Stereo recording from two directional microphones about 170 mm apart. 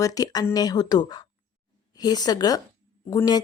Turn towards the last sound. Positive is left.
turn(degrees=20)  # may be behind; listen again after turning